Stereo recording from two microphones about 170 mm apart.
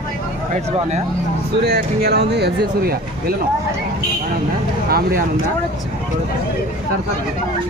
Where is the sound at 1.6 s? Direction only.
70° right (ahead or behind).